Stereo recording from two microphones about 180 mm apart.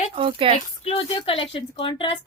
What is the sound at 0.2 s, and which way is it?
Speech, 30° right (ahead or behind).